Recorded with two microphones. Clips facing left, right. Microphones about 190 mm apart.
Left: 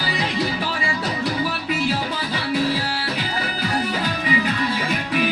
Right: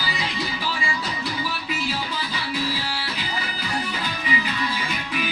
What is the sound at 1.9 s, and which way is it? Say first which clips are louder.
Music: left 4 dB; 50° left (ahead or behind).